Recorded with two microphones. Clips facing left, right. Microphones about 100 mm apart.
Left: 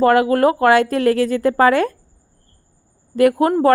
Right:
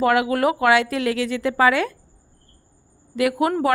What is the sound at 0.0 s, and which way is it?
A woman's voice, 40° left (ahead or behind).